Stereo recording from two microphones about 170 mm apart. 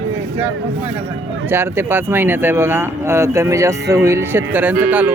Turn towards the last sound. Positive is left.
turn(degrees=-10)  # may be behind; listen again after turning